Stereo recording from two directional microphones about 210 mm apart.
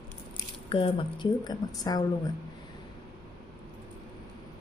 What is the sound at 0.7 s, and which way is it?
A woman's voice, 25° left (ahead or behind).